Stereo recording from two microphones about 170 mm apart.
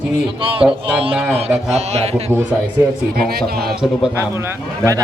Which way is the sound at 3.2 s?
65° right (ahead or behind).